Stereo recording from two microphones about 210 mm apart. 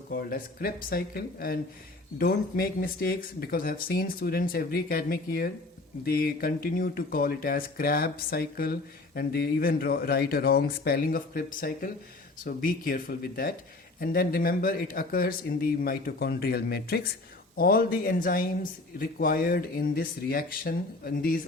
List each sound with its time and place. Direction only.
0.1 s speech: 45° left (ahead or behind)